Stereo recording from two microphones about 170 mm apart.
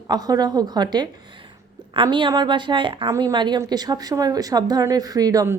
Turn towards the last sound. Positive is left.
turn(degrees=-20)  # may be behind; listen again after turning